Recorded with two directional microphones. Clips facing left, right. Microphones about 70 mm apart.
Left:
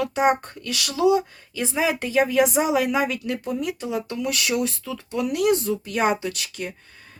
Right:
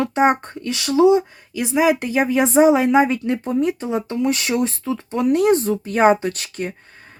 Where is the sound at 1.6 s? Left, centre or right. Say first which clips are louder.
Right 6 dB; centre.